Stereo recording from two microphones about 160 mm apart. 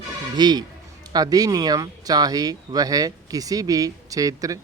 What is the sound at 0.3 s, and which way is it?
Speech, 25° right (ahead or behind).